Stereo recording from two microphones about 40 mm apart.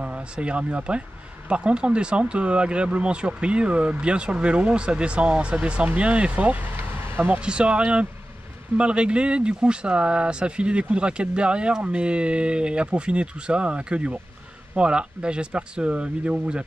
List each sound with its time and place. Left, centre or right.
0.0 s speech: right
7.1 s a sound: right
7.3 s speech: right